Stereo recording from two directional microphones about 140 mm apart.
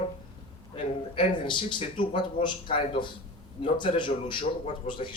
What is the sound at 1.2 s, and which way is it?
Speech, 35° left (ahead or behind).